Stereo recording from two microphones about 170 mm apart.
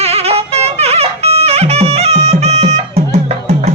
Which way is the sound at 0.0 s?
35° right (ahead or behind).